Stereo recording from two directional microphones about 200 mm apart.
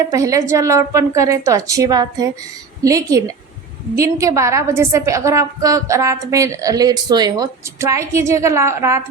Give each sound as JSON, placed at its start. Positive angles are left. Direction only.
{"t": 0.0, "sound": "a woman's voice", "side_deg": -15}